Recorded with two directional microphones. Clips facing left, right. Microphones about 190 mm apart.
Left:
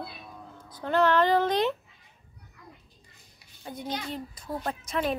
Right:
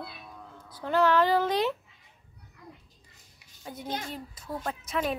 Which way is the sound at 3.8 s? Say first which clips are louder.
Left 1 dB; 45° right (ahead or behind).